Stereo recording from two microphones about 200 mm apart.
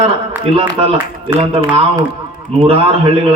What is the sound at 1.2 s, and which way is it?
A man's voice, 25° right (ahead or behind).